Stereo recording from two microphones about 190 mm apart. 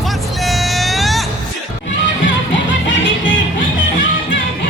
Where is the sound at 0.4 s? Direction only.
Centre (ahead or behind).